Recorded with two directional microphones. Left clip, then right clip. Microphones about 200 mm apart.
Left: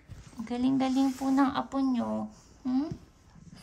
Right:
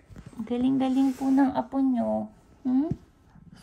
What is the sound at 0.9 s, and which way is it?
Speech, centre (ahead or behind).